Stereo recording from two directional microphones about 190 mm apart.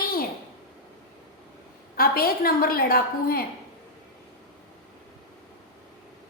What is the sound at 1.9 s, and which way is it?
A woman's voice, 50° left (ahead or behind).